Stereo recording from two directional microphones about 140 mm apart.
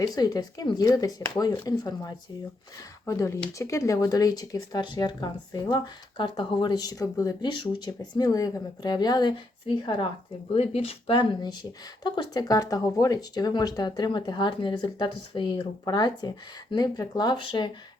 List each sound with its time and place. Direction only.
0.0 s speech: 30° left (ahead or behind)